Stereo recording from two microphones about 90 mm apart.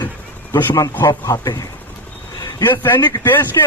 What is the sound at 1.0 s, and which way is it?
Speech, 40° left (ahead or behind).